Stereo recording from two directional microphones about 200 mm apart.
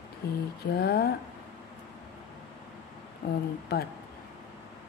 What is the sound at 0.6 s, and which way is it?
Speech, 50° left (ahead or behind).